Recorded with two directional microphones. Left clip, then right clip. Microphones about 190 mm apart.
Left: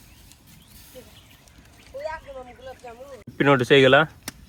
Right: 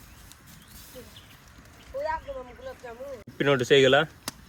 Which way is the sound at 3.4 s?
20° left (ahead or behind).